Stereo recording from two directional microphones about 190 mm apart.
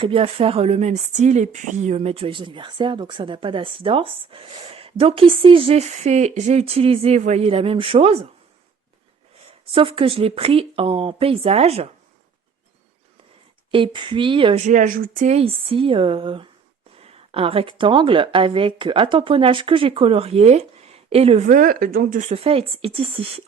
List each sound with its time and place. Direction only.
0.0 s speech: 30° right (ahead or behind)
9.5 s a woman's voice: 25° right (ahead or behind)
13.7 s a woman's voice: 25° right (ahead or behind)